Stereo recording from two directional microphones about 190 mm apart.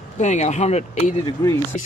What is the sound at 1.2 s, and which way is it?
Speech, 15° left (ahead or behind).